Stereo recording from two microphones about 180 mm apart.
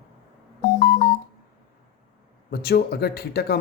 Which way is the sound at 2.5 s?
65° left (ahead or behind).